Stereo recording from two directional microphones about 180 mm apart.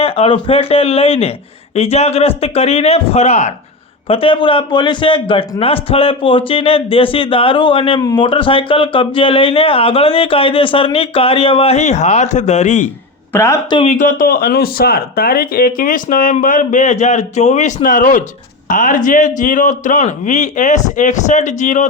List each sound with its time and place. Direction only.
0.0 s a man's voice: 30° left (ahead or behind)
13.3 s speech: 15° left (ahead or behind)
13.8 s speech: 45° left (ahead or behind)